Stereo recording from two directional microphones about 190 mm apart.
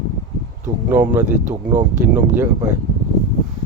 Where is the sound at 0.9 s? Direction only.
10° right (ahead or behind).